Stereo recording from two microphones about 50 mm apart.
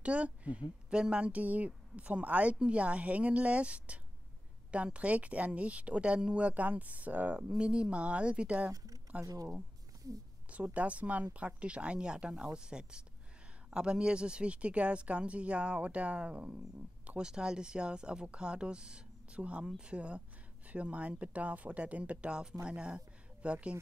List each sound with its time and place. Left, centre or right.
0.0 s speech: right
7.4 s speech: centre
10.5 s speech: right